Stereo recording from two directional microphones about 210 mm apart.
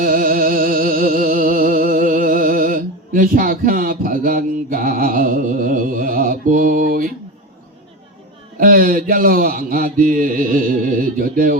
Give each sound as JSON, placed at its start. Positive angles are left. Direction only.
{"t": 0.0, "sound": "music", "side_deg": -40}
{"t": 8.5, "sound": "speech", "side_deg": -40}